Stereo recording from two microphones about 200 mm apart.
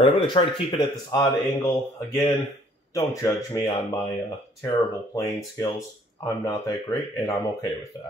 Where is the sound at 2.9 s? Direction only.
15° left (ahead or behind).